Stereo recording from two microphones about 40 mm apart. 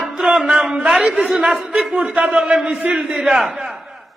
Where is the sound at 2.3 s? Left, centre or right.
Right.